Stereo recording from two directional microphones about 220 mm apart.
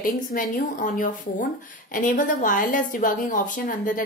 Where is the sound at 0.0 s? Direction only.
40° left (ahead or behind).